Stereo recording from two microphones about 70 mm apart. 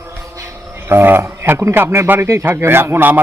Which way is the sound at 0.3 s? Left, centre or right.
Right.